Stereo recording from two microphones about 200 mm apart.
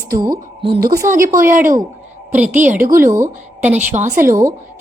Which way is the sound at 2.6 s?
35° right (ahead or behind).